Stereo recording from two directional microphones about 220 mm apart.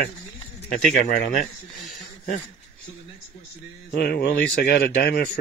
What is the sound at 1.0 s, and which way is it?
Speech, 35° left (ahead or behind).